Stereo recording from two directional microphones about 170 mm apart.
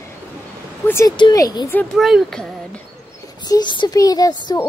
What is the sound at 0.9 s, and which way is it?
Speech, 15° left (ahead or behind).